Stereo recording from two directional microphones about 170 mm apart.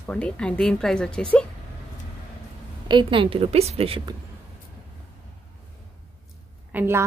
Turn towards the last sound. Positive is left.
turn(degrees=-15)  # may be behind; listen again after turning